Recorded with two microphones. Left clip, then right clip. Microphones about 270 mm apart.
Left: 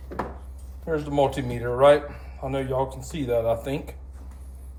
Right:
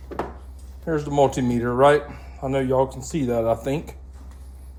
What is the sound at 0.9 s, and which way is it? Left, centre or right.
Speech, right.